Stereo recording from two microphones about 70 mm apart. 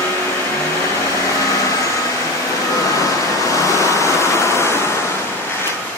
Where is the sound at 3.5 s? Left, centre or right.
Left.